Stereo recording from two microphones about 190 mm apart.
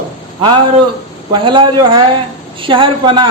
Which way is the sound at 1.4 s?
25° right (ahead or behind).